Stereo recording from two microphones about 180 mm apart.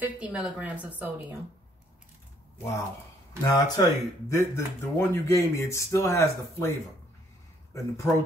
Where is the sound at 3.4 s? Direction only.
15° left (ahead or behind).